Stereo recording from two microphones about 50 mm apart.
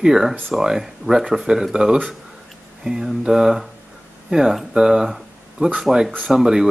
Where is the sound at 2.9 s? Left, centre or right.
Centre.